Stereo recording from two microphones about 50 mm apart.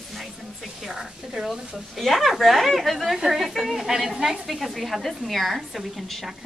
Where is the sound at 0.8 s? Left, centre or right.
Centre.